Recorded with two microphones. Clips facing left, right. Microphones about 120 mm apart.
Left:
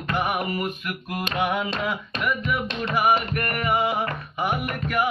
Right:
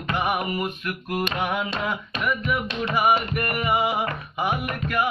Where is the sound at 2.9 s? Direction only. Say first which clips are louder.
Even; 5° right (ahead or behind).